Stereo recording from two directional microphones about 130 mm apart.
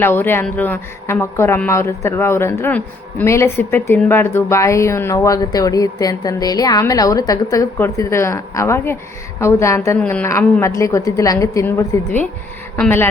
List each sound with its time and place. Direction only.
0.0 s a woman's voice: 15° left (ahead or behind)
10.0 s speech: 10° left (ahead or behind)
10.2 s a woman's voice: 20° left (ahead or behind)